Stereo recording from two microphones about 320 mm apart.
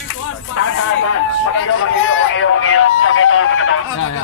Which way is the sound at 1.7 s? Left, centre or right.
Left.